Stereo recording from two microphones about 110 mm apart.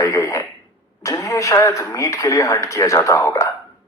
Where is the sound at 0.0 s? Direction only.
30° left (ahead or behind).